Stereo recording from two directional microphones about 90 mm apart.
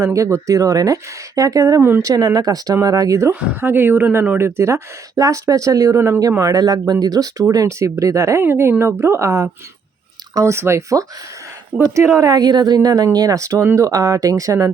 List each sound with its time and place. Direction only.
0.0 s a woman's voice: 35° right (ahead or behind)
3.5 s speech: 20° right (ahead or behind)
11.7 s speech: 10° right (ahead or behind)
12.2 s a woman's voice: 50° right (ahead or behind)